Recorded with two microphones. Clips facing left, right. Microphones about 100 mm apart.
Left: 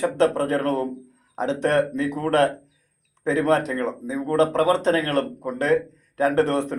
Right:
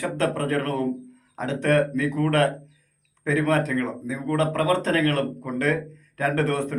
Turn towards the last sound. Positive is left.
turn(degrees=25)  # may be behind; listen again after turning